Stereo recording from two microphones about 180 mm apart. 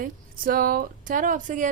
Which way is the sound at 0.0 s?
50° right (ahead or behind).